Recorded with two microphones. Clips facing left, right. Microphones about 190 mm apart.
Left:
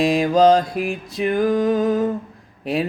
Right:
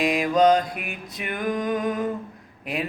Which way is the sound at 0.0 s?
30° left (ahead or behind).